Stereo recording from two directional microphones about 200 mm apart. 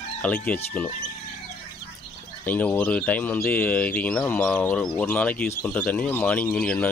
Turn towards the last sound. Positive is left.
turn(degrees=5)  # may be behind; listen again after turning